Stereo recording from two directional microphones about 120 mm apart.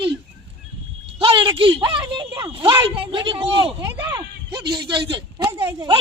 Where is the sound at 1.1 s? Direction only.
45° right (ahead or behind).